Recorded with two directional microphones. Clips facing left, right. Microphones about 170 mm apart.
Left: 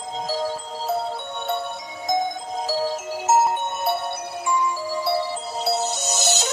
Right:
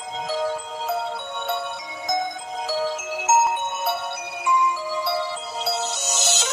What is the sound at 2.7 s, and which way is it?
Music, 35° left (ahead or behind).